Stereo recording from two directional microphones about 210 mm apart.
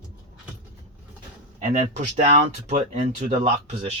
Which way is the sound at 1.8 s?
30° right (ahead or behind).